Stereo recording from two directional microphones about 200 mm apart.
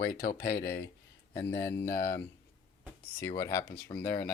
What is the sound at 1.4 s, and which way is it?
Speech, 10° left (ahead or behind).